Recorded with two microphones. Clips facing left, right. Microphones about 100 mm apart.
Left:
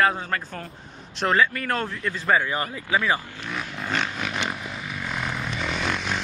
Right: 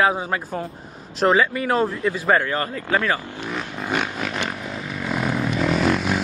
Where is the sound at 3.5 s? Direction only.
10° right (ahead or behind).